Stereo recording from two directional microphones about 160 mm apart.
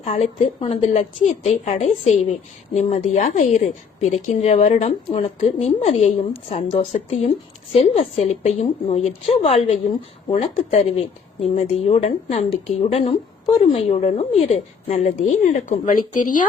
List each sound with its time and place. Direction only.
0.0 s speech: 40° left (ahead or behind)